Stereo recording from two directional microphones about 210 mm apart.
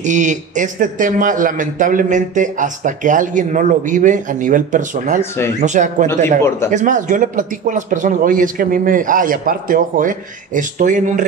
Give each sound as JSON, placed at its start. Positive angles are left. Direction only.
{"t": 0.0, "sound": "a man's voice", "side_deg": -35}